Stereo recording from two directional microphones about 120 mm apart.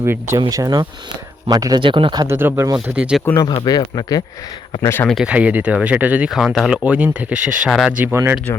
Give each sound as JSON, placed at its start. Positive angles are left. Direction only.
{"t": 0.0, "sound": "speech", "side_deg": -20}
{"t": 1.8, "sound": "speech", "side_deg": -45}
{"t": 2.2, "sound": "speech", "side_deg": -20}
{"t": 2.8, "sound": "speech", "side_deg": -10}
{"t": 3.6, "sound": "speech", "side_deg": 35}
{"t": 4.8, "sound": "speech", "side_deg": 20}
{"t": 5.0, "sound": "speech", "side_deg": -5}
{"t": 7.9, "sound": "speech", "side_deg": -20}